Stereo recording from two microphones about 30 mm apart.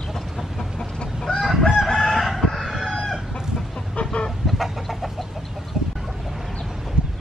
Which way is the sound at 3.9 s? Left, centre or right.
Left.